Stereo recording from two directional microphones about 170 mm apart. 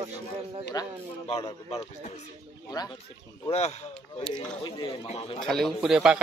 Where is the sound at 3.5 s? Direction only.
40° left (ahead or behind).